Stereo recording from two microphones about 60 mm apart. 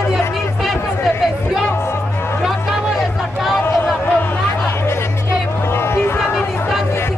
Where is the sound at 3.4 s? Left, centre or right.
Centre.